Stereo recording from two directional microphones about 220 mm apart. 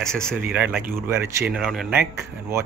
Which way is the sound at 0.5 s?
10° right (ahead or behind).